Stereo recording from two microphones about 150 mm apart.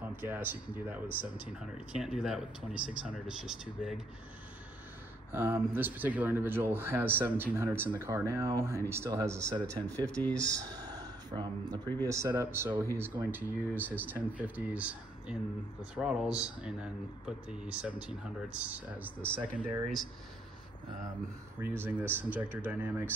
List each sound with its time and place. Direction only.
0.1 s speech: 15° right (ahead or behind)
5.3 s speech: 15° right (ahead or behind)
9.8 s speech: 10° left (ahead or behind)
10.8 s a sound: 25° right (ahead or behind)
11.8 s speech: 15° left (ahead or behind)
12.1 s speech: 20° right (ahead or behind); by 20.1 s 5° right (ahead or behind)
21.5 s speech: 15° right (ahead or behind)